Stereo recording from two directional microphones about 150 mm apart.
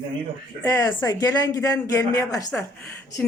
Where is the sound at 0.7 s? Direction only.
25° left (ahead or behind).